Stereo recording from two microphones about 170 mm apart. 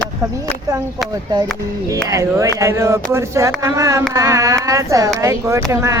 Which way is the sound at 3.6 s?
20° right (ahead or behind).